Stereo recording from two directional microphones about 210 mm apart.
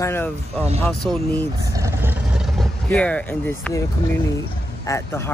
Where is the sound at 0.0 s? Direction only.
10° left (ahead or behind).